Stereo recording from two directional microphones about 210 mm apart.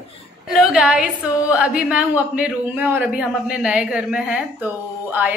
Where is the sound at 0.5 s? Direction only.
5° right (ahead or behind).